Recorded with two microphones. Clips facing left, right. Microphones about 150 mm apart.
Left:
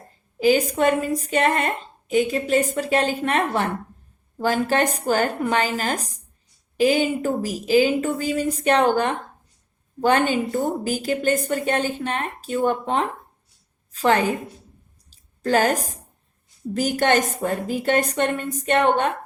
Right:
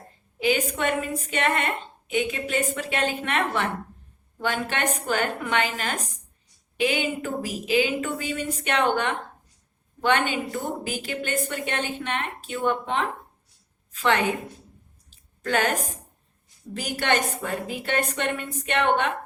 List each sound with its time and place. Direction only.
0.3 s a woman's voice: 35° left (ahead or behind)
15.1 s a sound: 35° left (ahead or behind)
16.7 s a woman's voice: 40° left (ahead or behind)